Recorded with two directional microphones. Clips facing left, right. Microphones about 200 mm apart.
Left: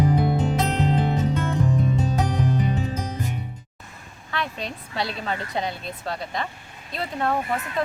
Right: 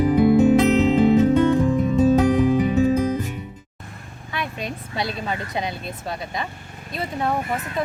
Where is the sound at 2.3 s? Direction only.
90° right.